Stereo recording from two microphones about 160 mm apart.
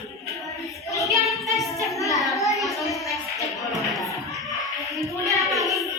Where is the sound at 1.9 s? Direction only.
20° left (ahead or behind).